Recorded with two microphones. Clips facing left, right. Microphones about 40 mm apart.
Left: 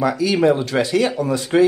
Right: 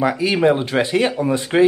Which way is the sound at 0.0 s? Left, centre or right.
Right.